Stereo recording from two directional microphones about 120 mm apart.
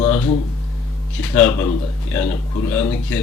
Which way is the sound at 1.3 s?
20° left (ahead or behind).